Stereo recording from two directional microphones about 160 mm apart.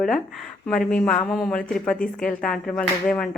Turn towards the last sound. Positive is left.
turn(degrees=5)  # may be behind; listen again after turning